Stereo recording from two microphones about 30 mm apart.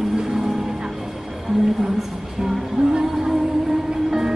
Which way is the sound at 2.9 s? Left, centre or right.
Centre.